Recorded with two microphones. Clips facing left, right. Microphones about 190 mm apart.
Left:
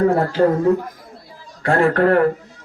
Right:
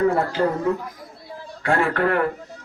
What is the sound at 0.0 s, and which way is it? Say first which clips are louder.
Speech: left 4 dB; 45° left (ahead or behind).